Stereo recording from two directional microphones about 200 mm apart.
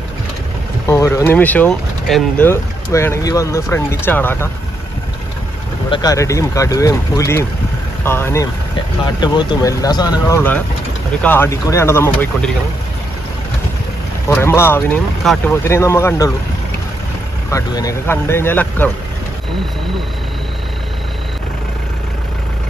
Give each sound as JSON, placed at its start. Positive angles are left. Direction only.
{"t": 0.8, "sound": "speech", "side_deg": 15}
{"t": 5.9, "sound": "speech", "side_deg": 20}
{"t": 14.2, "sound": "speech", "side_deg": 15}
{"t": 17.5, "sound": "speech", "side_deg": 15}